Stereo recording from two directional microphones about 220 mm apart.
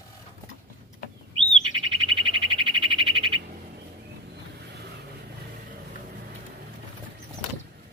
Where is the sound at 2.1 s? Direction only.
25° right (ahead or behind).